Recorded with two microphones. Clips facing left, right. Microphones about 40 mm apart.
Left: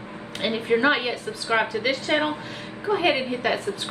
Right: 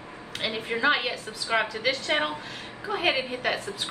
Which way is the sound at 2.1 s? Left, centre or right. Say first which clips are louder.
Left 4 dB; centre.